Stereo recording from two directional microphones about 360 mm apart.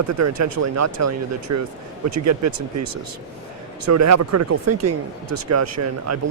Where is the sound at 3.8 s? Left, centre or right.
Right.